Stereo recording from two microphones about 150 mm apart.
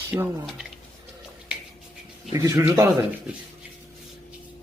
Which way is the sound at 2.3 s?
20° right (ahead or behind).